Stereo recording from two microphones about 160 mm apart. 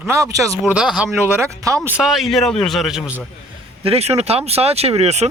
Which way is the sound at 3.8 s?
40° right (ahead or behind).